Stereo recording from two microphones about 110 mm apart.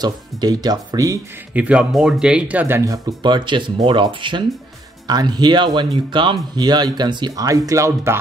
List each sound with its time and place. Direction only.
0.0 s speech: 40° right (ahead or behind)
1.5 s speech: 10° right (ahead or behind)
3.2 s speech: 45° right (ahead or behind); by 8.2 s 25° right (ahead or behind)